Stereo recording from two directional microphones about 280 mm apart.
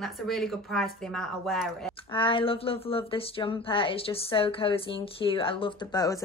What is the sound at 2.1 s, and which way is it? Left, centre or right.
Speech, centre.